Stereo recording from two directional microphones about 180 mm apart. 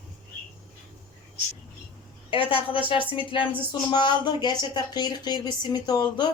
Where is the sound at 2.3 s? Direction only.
30° left (ahead or behind).